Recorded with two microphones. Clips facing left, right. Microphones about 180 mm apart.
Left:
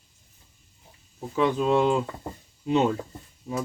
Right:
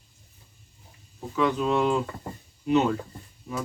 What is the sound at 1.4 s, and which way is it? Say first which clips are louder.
Speech: left 2 dB; 30° left (ahead or behind).